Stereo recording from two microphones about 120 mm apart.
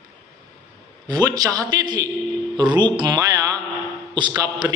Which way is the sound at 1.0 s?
35° right (ahead or behind).